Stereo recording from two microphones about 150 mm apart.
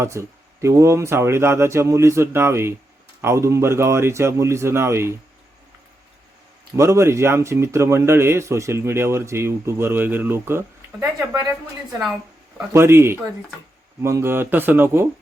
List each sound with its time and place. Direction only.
0.0 s speech: 20° right (ahead or behind)
6.7 s speech: 20° right (ahead or behind)
12.5 s speech: 15° right (ahead or behind)